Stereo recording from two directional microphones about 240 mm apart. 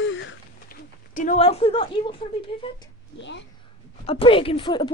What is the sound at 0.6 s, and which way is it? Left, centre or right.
Speech, left.